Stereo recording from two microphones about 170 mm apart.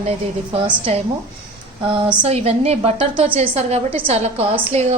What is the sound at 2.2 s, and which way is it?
A woman's voice, 35° right (ahead or behind).